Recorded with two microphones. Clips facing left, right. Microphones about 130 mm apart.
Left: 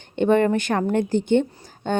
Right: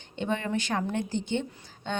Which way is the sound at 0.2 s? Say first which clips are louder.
Left 12 dB; 55° left (ahead or behind).